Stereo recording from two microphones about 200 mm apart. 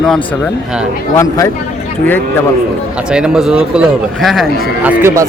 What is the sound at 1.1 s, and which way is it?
Speech, 15° left (ahead or behind).